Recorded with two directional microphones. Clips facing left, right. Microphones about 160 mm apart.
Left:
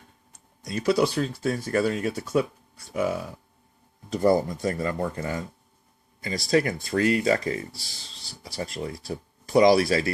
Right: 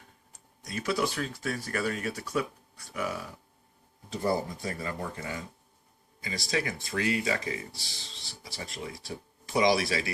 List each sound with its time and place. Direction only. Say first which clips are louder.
0.3 s speech: left 6 dB; 35° left (ahead or behind)
4.2 s speech: left 8 dB; 45° left (ahead or behind)